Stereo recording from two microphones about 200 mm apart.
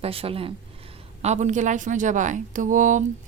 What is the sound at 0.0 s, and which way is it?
Speech, 30° right (ahead or behind).